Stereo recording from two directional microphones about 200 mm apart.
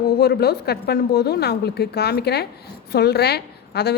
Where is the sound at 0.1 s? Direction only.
50° left (ahead or behind).